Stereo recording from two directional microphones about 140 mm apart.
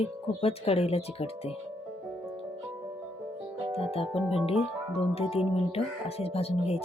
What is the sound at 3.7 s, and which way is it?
Speech, 45° left (ahead or behind).